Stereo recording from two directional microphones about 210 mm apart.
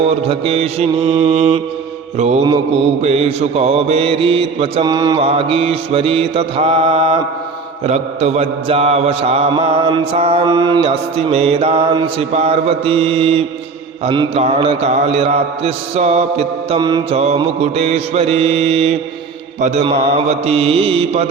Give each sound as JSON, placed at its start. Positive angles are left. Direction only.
{"t": 0.0, "sound": "mantra", "side_deg": -25}